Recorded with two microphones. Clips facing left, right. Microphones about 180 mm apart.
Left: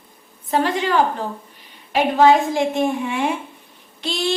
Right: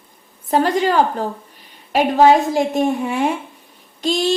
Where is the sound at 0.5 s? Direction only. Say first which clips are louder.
Right 3 dB; 40° right (ahead or behind).